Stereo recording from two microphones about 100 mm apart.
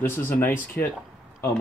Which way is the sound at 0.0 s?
20° left (ahead or behind).